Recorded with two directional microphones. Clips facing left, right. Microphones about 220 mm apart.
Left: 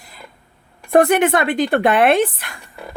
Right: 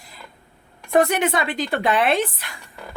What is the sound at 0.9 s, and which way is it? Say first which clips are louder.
Speech: left 5 dB; 55° left (ahead or behind).